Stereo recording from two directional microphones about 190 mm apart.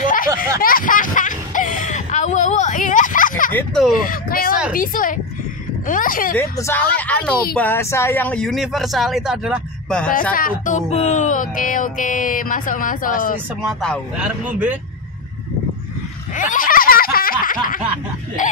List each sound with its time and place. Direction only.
0.0 s a sound: 45° left (ahead or behind)
3.5 s speech: 5° left (ahead or behind)
4.0 s a sound: 50° left (ahead or behind)
4.7 s speech: 45° left (ahead or behind)
6.3 s a woman's voice: 15° left (ahead or behind)
10.3 s speech: 45° left (ahead or behind)
13.6 s speech: 5° left (ahead or behind)
16.3 s snicker: 45° left (ahead or behind)
18.4 s speech: 40° left (ahead or behind)